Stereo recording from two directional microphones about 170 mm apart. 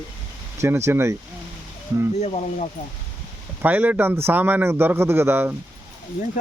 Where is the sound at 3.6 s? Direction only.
10° right (ahead or behind).